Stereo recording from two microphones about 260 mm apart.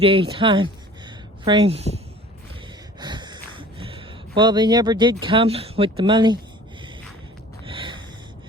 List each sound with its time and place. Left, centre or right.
0.0 s speech: right
3.0 s a sound: centre
5.2 s speech: centre
7.7 s snort: centre